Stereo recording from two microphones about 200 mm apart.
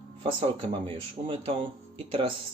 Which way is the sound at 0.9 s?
25° right (ahead or behind).